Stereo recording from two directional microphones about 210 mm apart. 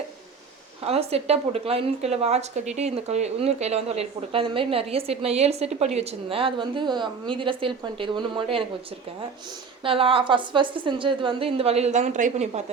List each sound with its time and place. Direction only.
0.9 s a woman's voice: 30° right (ahead or behind)
9.8 s a woman's voice: 25° right (ahead or behind)